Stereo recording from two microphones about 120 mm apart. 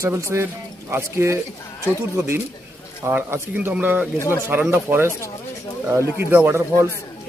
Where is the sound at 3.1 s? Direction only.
15° right (ahead or behind).